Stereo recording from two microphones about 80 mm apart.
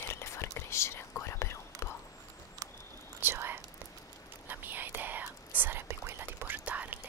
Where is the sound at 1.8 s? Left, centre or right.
Left.